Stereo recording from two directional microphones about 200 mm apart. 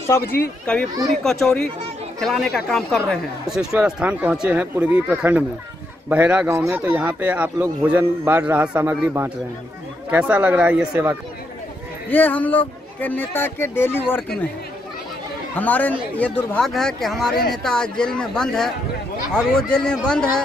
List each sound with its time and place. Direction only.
0.2 s speech: 50° left (ahead or behind)
1.2 s speech: centre (ahead or behind)
12.1 s speech: 10° left (ahead or behind)
15.5 s speech: 10° left (ahead or behind)